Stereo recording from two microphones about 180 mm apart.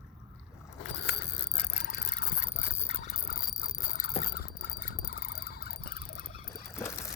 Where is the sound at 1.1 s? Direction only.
65° left (ahead or behind).